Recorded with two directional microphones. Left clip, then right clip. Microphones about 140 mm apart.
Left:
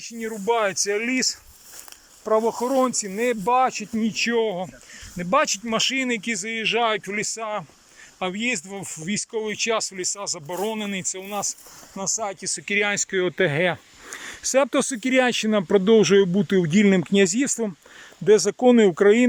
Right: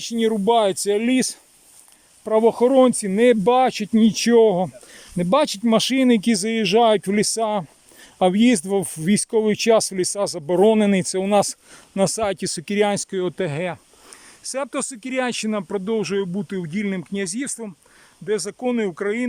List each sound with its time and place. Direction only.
0.1 s speech: 40° right (ahead or behind)
3.9 s speech: 50° right (ahead or behind)
5.1 s speech: 40° right (ahead or behind)
8.2 s speech: 60° right (ahead or behind); by 13.4 s 30° right (ahead or behind)
13.4 s speech: 15° right (ahead or behind)
14.1 s speech: centre (ahead or behind)